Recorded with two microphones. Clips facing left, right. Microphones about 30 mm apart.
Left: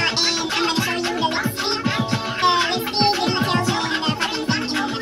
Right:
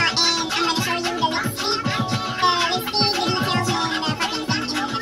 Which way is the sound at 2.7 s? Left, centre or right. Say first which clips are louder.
Left 2 dB; centre.